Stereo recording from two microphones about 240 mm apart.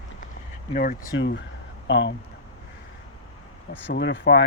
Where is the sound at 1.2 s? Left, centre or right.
Left.